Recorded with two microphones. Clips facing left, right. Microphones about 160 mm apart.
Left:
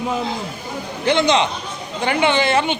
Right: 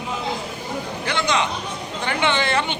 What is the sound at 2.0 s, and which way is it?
Speech, 10° left (ahead or behind).